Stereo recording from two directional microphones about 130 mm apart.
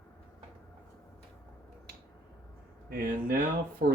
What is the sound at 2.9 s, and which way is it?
Speech, 90° right.